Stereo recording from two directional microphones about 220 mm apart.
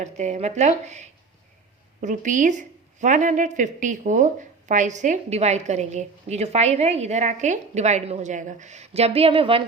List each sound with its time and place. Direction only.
0.0 s a woman's voice: 30° right (ahead or behind)